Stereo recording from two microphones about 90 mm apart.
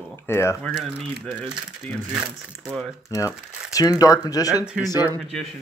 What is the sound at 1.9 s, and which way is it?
Speech, 20° left (ahead or behind).